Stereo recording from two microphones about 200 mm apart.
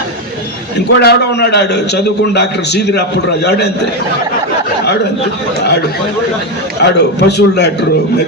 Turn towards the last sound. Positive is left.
turn(degrees=55)  # may be behind; listen again after turning